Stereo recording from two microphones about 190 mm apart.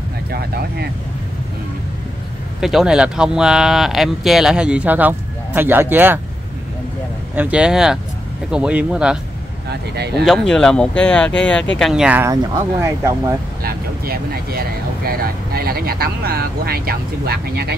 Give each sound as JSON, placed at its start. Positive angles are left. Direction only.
{"t": 0.3, "sound": "speech", "side_deg": -55}
{"t": 2.6, "sound": "speech", "side_deg": 0}
{"t": 7.3, "sound": "speech", "side_deg": -5}
{"t": 9.7, "sound": "speech", "side_deg": -60}
{"t": 10.2, "sound": "speech", "side_deg": 0}
{"t": 13.6, "sound": "speech", "side_deg": -55}